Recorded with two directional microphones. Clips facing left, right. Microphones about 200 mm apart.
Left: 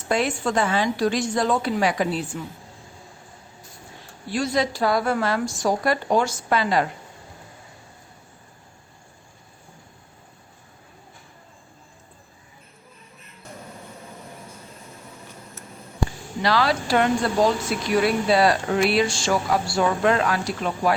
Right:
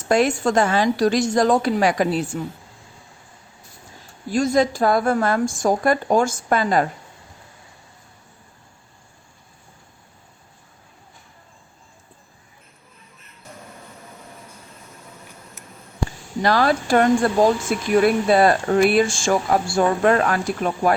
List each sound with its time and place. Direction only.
0.1 s speech: 45° right (ahead or behind)
4.3 s speech: 45° right (ahead or behind)
16.4 s speech: 50° right (ahead or behind)